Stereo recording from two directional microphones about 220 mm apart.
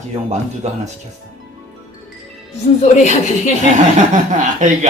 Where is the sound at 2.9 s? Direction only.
30° left (ahead or behind).